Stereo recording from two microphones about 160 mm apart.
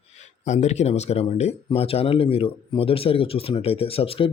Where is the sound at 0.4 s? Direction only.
45° left (ahead or behind).